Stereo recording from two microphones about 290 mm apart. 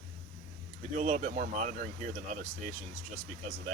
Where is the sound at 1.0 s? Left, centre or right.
Right.